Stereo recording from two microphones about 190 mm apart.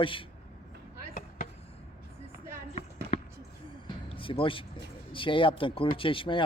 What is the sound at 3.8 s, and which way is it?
Music, 25° left (ahead or behind).